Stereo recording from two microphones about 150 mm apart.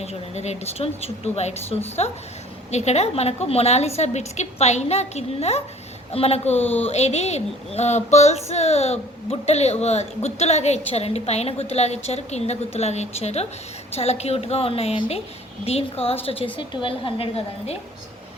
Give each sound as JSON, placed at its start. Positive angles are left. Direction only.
{"t": 0.0, "sound": "female singing", "side_deg": 45}
{"t": 6.6, "sound": "speech", "side_deg": 10}
{"t": 6.8, "sound": "female singing", "side_deg": 45}
{"t": 15.6, "sound": "a woman's voice", "side_deg": 40}